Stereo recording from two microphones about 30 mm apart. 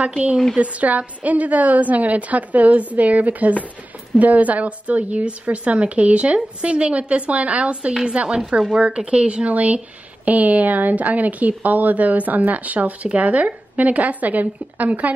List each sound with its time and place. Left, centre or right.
0.0 s speech: right
0.6 s a woman's voice: right
8.5 s speech: right
9.5 s a woman's voice: right